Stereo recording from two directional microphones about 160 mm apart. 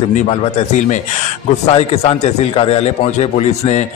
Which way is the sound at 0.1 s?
45° left (ahead or behind).